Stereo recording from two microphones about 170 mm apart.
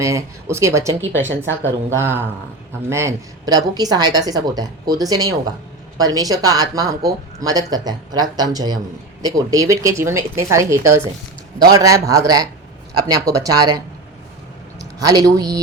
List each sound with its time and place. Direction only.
0.0 s speech: 15° right (ahead or behind)